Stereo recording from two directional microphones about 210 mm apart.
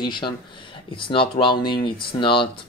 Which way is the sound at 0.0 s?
20° left (ahead or behind).